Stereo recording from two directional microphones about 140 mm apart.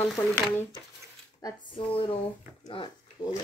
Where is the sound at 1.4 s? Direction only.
40° left (ahead or behind).